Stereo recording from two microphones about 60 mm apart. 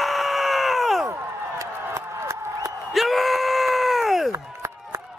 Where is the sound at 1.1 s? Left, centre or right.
Right.